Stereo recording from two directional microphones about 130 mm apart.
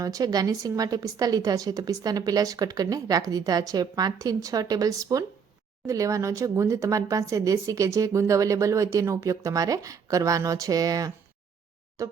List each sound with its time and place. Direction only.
0.0 s speech: 25° right (ahead or behind)